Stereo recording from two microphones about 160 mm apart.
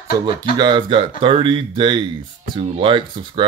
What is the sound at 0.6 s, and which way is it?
Speech, 30° right (ahead or behind).